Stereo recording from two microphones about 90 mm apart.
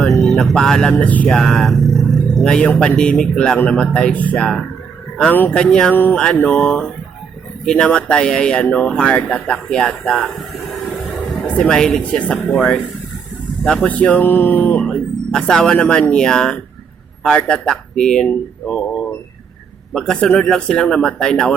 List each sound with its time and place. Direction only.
0.3 s speech: centre (ahead or behind)
1.3 s speech: 5° left (ahead or behind)
5.9 s a sound: 20° left (ahead or behind)
6.3 s speech: 15° left (ahead or behind)
11.4 s speech: 10° left (ahead or behind)
12.4 s speech: centre (ahead or behind); by 14.8 s 20° left (ahead or behind)
14.8 s speech: 5° left (ahead or behind)